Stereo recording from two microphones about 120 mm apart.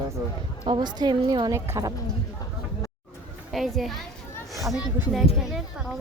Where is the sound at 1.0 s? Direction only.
40° right (ahead or behind).